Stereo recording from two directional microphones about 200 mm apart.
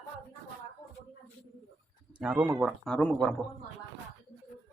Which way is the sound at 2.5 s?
5° right (ahead or behind).